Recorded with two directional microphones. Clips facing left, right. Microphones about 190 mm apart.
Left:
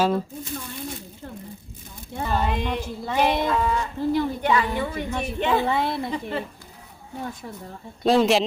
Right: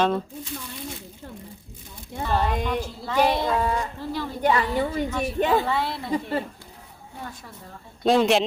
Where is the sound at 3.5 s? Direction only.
35° right (ahead or behind).